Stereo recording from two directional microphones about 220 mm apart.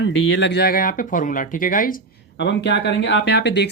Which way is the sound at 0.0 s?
55° left (ahead or behind).